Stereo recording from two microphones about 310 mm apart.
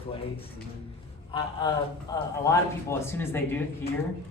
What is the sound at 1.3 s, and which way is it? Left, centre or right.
A man's voice, centre.